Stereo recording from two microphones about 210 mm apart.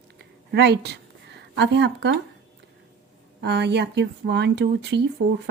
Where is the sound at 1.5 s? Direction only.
55° right (ahead or behind).